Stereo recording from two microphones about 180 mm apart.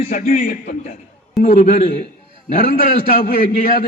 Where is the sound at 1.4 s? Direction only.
35° left (ahead or behind).